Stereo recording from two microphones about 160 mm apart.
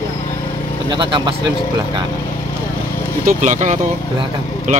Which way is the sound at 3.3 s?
50° right (ahead or behind).